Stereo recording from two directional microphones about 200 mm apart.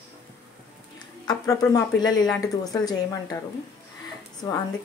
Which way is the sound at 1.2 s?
15° left (ahead or behind).